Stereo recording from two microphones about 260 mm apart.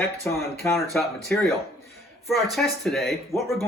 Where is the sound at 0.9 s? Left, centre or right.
Centre.